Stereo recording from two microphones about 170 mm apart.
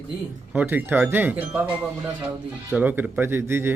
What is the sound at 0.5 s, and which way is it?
Speech, 10° right (ahead or behind).